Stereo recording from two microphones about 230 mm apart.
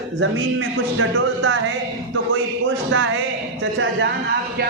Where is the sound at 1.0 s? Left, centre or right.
Right.